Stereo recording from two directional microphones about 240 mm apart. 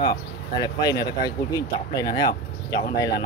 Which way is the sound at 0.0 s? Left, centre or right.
Centre.